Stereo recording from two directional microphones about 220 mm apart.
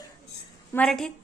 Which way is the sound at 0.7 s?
5° left (ahead or behind).